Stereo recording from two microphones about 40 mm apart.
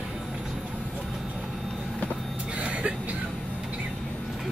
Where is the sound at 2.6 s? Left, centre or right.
Right.